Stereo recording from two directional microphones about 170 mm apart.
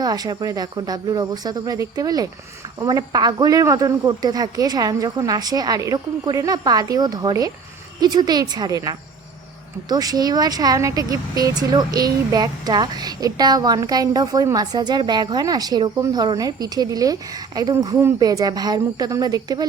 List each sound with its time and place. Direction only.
0.0 s speech: 25° right (ahead or behind)